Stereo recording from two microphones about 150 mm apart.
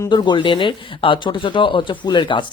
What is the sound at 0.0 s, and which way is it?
Speech, 30° left (ahead or behind).